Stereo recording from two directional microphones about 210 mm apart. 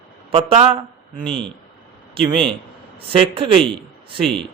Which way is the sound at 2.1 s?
25° right (ahead or behind).